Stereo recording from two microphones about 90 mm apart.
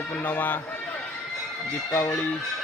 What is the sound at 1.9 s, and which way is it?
Speech, 35° left (ahead or behind).